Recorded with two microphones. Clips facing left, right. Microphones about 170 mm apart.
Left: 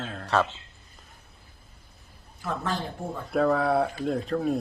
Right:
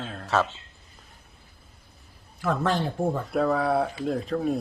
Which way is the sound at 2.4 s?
90° right.